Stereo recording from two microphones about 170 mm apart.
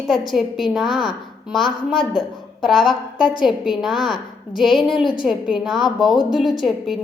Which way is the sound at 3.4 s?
Centre (ahead or behind).